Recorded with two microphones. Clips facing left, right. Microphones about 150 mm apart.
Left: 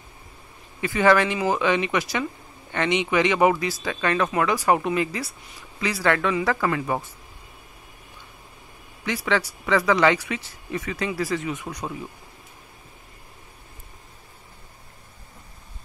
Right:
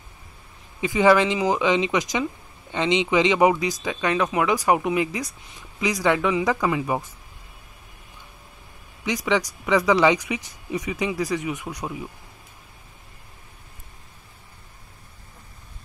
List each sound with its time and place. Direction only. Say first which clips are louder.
0.7 s speech: right 1 dB; 15° right (ahead or behind)
9.0 s speech: right 1 dB; 15° right (ahead or behind)